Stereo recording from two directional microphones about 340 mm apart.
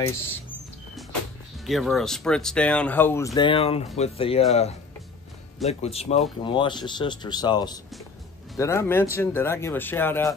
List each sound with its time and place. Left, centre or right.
1.7 s speech: centre
5.6 s speech: centre